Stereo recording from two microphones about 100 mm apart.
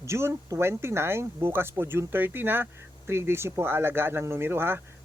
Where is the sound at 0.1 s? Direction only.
25° right (ahead or behind).